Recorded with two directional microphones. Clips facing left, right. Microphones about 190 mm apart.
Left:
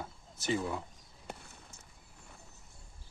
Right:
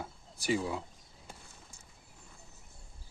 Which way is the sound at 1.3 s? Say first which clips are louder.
Left 6 dB; 65° left (ahead or behind).